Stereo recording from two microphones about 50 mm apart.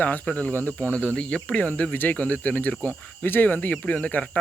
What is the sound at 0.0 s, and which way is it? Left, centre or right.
Speech, left.